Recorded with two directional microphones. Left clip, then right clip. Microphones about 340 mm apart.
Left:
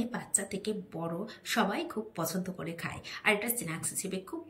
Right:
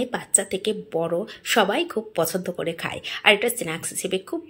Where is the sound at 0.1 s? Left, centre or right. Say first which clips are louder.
Right 11 dB; centre.